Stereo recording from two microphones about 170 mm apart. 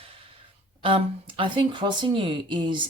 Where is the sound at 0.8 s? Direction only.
30° right (ahead or behind).